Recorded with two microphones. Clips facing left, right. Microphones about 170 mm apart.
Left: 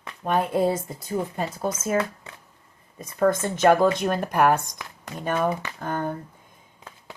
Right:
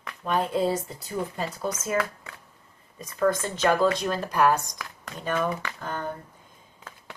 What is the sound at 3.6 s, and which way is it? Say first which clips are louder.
Speech: left 4 dB; 55° left (ahead or behind).